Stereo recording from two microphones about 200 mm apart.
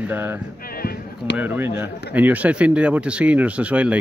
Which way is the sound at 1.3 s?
10° right (ahead or behind).